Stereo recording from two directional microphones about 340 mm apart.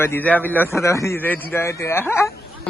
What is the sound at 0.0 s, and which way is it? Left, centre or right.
A man's voice, centre.